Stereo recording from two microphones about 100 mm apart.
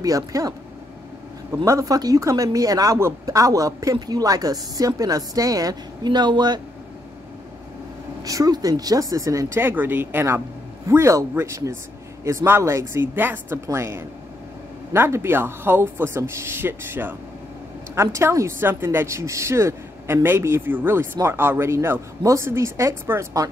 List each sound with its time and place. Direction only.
0.0 s speech: 35° right (ahead or behind)
1.6 s speech: 35° right (ahead or behind)
8.2 s speech: 35° right (ahead or behind)